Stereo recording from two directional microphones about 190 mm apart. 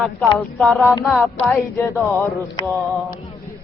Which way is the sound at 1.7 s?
15° left (ahead or behind).